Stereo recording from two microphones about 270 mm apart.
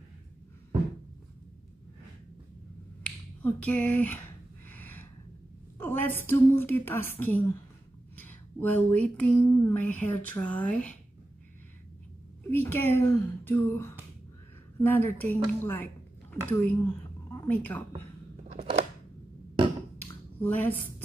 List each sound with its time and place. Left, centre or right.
3.4 s speech: centre
4.6 s a sound: centre
5.8 s speech: centre
12.4 s speech: centre
18.5 s a sound: right
20.3 s a woman's voice: centre